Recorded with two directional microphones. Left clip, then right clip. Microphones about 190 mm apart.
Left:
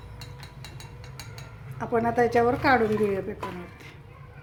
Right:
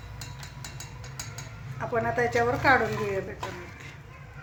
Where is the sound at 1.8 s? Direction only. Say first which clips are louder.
Left 3 dB; 60° left (ahead or behind).